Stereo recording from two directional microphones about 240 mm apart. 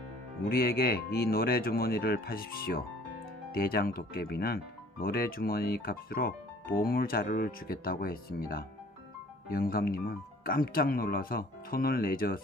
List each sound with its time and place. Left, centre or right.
0.4 s speech: left